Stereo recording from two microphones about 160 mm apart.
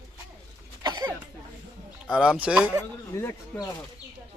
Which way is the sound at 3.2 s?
20° left (ahead or behind).